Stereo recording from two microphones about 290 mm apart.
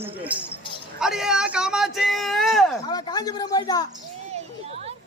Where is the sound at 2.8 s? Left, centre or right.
Centre.